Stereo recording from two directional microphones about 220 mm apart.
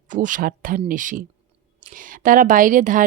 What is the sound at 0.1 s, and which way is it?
Speech, 35° right (ahead or behind).